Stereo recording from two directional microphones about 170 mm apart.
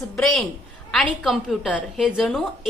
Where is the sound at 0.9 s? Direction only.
Centre (ahead or behind).